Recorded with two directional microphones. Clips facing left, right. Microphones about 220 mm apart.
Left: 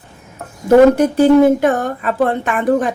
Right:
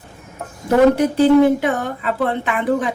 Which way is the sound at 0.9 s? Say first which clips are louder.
Left 2 dB; 45° left (ahead or behind).